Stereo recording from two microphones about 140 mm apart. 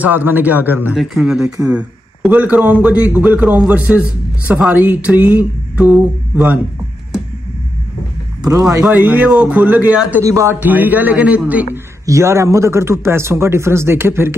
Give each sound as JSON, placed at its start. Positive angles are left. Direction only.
{"t": 0.0, "sound": "a man's voice", "side_deg": -15}
{"t": 0.9, "sound": "a man's voice", "side_deg": -5}
{"t": 8.4, "sound": "speech", "side_deg": -25}
{"t": 9.0, "sound": "a man's voice", "side_deg": -10}